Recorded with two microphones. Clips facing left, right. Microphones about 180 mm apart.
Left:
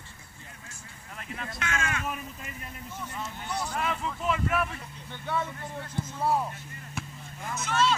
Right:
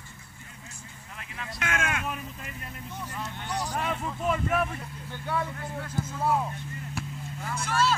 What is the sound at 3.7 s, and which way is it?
Vehicle, 35° right (ahead or behind).